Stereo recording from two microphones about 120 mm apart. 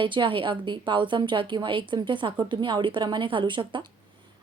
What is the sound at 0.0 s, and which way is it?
A woman's voice, 45° right (ahead or behind).